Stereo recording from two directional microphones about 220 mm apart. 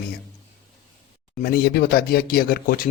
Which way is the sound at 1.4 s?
45° left (ahead or behind).